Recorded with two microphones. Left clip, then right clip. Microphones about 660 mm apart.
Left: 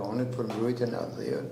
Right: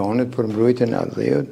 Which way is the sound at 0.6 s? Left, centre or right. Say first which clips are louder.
Right 12 dB; right.